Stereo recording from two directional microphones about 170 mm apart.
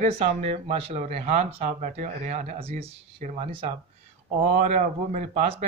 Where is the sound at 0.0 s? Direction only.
35° right (ahead or behind).